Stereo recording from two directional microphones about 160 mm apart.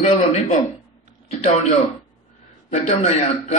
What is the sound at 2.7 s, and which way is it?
Speech, 40° left (ahead or behind).